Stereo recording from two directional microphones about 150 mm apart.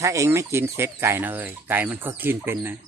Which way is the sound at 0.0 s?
20° right (ahead or behind).